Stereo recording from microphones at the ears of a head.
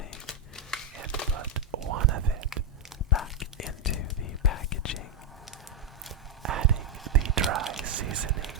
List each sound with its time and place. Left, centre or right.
0.9 s whispering: right
3.1 s whispering: left
6.4 s whispering: right